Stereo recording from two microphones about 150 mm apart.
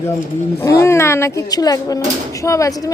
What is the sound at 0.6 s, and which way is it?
Speech, 20° left (ahead or behind).